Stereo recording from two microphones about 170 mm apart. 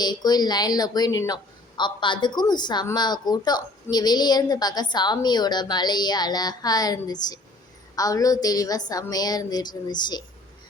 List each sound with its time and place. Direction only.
0.0 s speech: 25° left (ahead or behind)